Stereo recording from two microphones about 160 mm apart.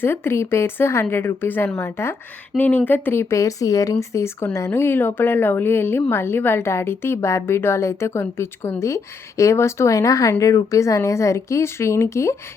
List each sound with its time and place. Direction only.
0.0 s a woman's voice: 15° left (ahead or behind)